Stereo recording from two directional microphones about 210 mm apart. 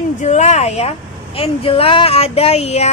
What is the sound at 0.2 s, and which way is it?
A woman's voice, 35° left (ahead or behind).